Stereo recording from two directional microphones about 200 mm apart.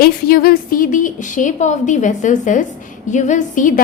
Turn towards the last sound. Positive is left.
turn(degrees=40)  # may be behind; listen again after turning